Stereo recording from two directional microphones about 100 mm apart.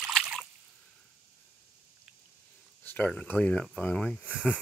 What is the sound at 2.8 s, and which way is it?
Speech, 15° left (ahead or behind).